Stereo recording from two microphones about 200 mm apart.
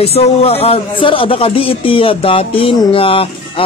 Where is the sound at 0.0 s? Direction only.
30° left (ahead or behind).